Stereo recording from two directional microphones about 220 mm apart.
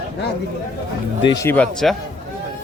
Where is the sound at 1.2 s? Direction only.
15° left (ahead or behind).